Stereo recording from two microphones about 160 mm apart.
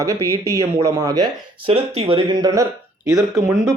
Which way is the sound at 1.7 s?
35° right (ahead or behind).